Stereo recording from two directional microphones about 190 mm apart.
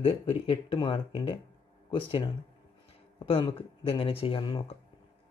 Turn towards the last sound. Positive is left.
turn(degrees=25)  # may be behind; listen again after turning